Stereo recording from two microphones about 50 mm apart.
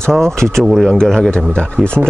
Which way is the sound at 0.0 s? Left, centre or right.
Centre.